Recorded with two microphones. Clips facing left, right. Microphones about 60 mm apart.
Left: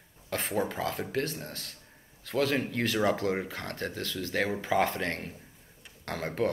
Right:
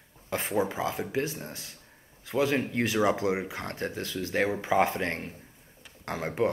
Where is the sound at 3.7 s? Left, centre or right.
Right.